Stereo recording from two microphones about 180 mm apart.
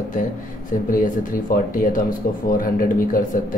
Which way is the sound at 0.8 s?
50° left (ahead or behind).